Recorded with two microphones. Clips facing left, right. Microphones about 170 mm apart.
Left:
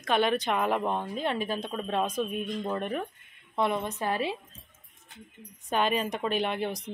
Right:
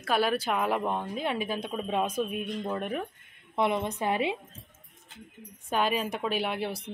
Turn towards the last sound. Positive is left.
turn(degrees=-5)  # may be behind; listen again after turning